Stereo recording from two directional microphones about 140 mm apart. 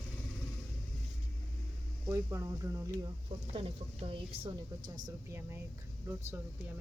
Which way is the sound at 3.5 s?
45° right (ahead or behind).